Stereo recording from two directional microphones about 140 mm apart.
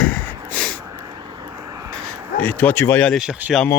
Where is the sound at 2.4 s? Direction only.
10° left (ahead or behind).